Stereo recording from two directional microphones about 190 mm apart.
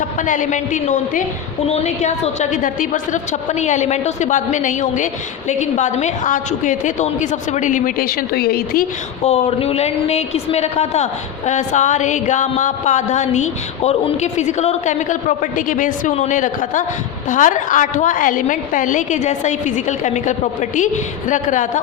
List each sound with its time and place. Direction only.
0.2 s a woman's voice: 40° left (ahead or behind)
9.2 s a woman's voice: 30° left (ahead or behind)